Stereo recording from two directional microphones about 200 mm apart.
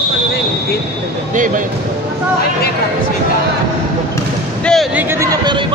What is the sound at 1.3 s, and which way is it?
Speech, 40° right (ahead or behind).